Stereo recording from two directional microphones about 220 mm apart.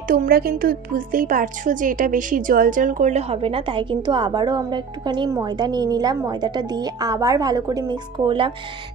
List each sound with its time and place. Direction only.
0.1 s speech: 40° right (ahead or behind); by 8.5 s 20° right (ahead or behind)